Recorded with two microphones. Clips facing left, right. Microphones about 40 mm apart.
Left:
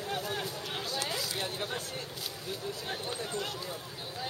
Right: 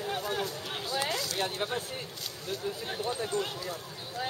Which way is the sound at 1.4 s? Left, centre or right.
Centre.